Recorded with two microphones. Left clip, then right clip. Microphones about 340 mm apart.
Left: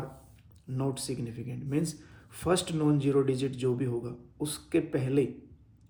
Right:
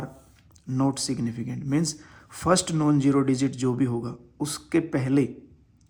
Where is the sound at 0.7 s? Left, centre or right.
Right.